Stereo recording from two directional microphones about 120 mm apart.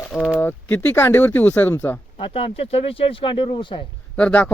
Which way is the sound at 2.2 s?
50° left (ahead or behind).